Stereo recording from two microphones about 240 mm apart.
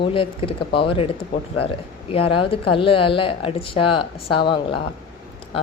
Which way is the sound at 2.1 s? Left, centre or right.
Left.